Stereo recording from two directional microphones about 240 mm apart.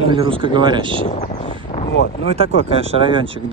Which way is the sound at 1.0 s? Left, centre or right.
Left.